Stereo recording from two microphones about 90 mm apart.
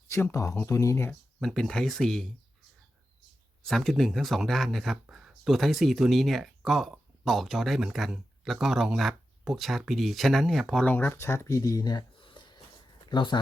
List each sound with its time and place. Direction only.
0.1 s speech: 35° left (ahead or behind)
1.4 s speech: 5° left (ahead or behind)
3.7 s speech: 5° left (ahead or behind)
10.8 s speech: 20° left (ahead or behind); by 12.2 s 50° left (ahead or behind)
12.2 s a sound: 60° left (ahead or behind)
13.1 s speech: 60° left (ahead or behind)